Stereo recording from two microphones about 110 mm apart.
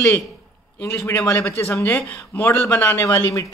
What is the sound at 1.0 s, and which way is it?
Speech, 20° left (ahead or behind).